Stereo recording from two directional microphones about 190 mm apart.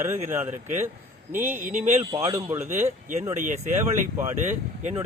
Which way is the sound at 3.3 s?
40° right (ahead or behind).